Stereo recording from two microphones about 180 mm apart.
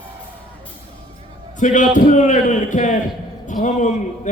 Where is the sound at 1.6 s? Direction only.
45° left (ahead or behind).